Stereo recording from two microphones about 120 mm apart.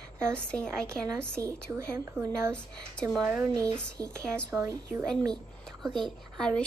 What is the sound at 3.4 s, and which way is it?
A woman's voice, 30° right (ahead or behind).